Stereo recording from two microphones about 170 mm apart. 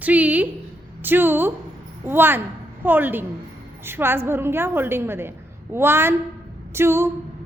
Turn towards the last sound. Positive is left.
turn(degrees=-15)  # may be behind; listen again after turning